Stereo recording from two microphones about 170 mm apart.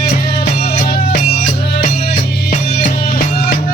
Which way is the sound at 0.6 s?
55° left (ahead or behind).